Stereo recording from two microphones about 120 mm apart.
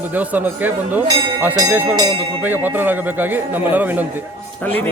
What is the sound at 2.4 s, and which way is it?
A man's voice, 15° right (ahead or behind).